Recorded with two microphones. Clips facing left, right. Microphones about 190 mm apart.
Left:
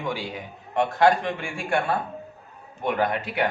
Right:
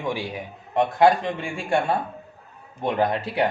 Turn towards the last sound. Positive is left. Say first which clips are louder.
# right 2 dB
turn(degrees=-25)  # may be behind; listen again after turning